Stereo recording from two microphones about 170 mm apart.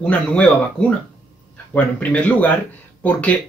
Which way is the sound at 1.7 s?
10° left (ahead or behind).